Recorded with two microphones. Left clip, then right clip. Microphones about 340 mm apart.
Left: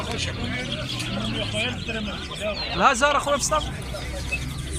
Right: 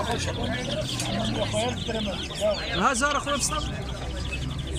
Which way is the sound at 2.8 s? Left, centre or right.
Centre.